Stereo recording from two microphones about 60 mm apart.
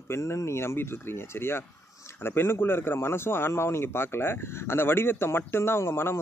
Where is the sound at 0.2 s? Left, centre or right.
Left.